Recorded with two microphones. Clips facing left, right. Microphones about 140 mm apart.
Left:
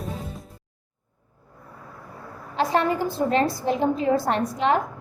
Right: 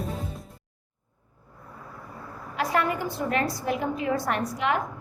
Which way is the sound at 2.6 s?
30° left (ahead or behind).